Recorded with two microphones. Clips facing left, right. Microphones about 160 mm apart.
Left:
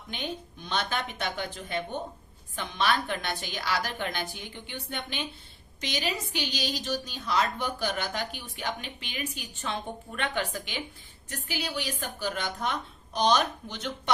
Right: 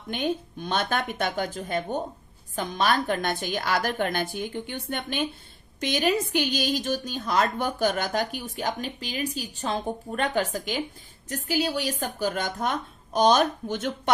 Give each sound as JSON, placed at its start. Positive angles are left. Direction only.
{"t": 0.1, "sound": "a woman's voice", "side_deg": -50}